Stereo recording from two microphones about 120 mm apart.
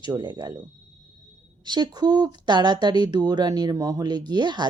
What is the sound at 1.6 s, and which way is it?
Speech, 35° right (ahead or behind).